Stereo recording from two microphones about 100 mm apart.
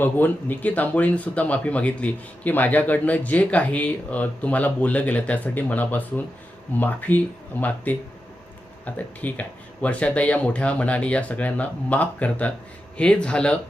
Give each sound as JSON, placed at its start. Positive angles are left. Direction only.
{"t": 0.0, "sound": "speech", "side_deg": 20}
{"t": 8.8, "sound": "speech", "side_deg": 15}